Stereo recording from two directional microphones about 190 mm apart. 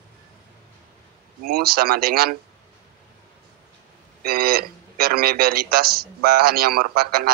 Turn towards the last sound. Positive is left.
turn(degrees=-55)  # may be behind; listen again after turning